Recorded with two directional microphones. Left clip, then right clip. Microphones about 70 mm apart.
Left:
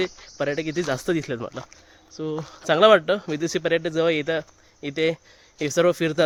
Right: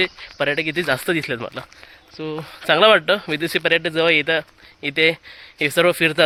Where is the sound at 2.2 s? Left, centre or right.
Left.